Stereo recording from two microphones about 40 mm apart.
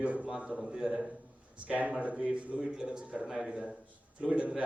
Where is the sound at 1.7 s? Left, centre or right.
Right; by 3.7 s centre.